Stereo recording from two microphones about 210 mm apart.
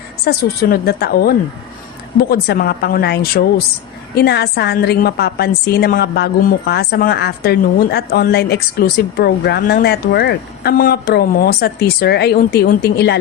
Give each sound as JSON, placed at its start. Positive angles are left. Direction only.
{"t": 0.3, "sound": "a woman's voice", "side_deg": 45}